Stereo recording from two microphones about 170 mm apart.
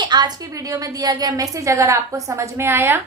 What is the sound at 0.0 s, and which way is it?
A woman's voice, 25° right (ahead or behind).